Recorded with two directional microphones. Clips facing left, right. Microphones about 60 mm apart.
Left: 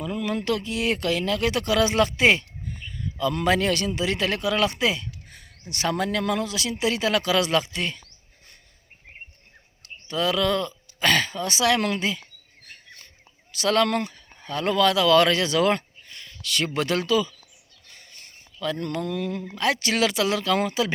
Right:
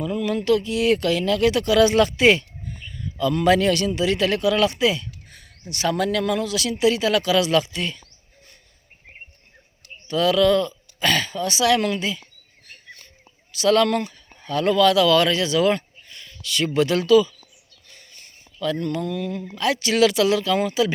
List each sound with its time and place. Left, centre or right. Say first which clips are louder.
0.1 s a sound: right 2 dB; left
0.3 s a man's voice: right 6 dB; left
10.1 s speech: right 6 dB; left
13.5 s speech: right 4 dB; left
18.6 s speech: right 3 dB; left